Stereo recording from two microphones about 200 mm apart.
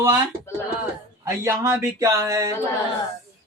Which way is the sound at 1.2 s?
15° right (ahead or behind).